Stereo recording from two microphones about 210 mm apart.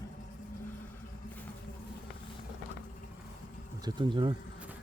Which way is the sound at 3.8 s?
20° right (ahead or behind).